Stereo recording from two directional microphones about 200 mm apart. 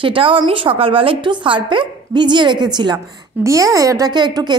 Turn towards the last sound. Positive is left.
turn(degrees=-20)  # may be behind; listen again after turning